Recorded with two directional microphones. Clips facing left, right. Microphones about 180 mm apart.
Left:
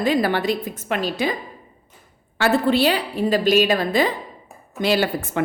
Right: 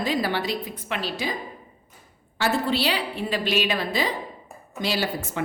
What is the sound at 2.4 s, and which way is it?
A woman's voice, 55° left (ahead or behind).